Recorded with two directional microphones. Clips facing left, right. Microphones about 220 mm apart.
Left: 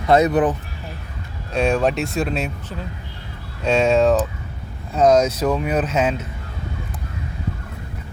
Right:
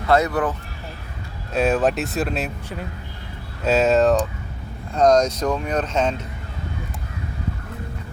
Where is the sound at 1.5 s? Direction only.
5° right (ahead or behind).